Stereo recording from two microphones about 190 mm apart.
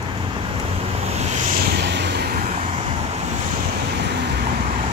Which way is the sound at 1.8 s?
65° right (ahead or behind).